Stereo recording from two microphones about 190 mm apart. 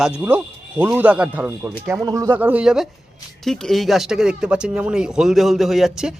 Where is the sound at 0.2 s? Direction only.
10° right (ahead or behind).